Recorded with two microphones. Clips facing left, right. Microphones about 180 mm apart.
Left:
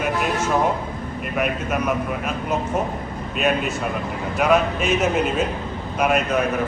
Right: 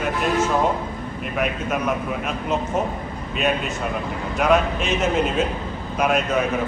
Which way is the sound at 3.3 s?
5° left (ahead or behind).